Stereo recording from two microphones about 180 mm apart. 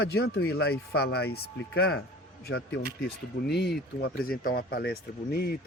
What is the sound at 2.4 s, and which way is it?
Speech, 90° left.